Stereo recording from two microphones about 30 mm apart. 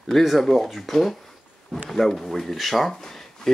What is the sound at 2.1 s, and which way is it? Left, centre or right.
Speech, centre.